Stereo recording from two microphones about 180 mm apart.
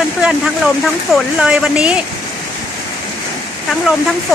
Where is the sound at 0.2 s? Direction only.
5° right (ahead or behind).